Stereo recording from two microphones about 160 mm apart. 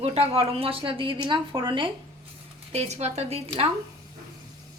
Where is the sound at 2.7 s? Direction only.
40° right (ahead or behind).